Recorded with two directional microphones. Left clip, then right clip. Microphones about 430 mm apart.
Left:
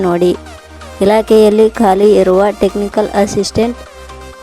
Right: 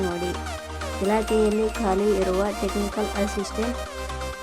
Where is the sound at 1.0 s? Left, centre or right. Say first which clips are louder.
Left 14 dB; centre.